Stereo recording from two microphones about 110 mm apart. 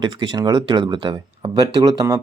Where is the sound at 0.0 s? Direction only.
45° right (ahead or behind).